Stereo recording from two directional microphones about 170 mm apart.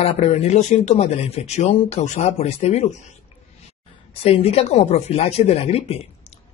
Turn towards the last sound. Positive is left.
turn(degrees=35)  # may be behind; listen again after turning